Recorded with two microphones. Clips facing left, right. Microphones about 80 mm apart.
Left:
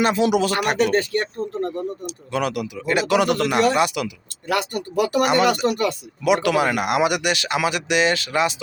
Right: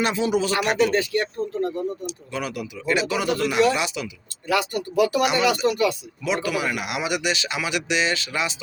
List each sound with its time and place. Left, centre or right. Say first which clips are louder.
0.2 s speech: left 3 dB; left
2.8 s speech: left 1 dB; left
3.1 s speech: left 5 dB; left